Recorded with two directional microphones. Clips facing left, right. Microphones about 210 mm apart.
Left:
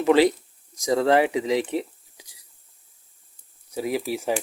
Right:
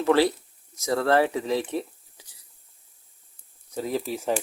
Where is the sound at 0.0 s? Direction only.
15° left (ahead or behind).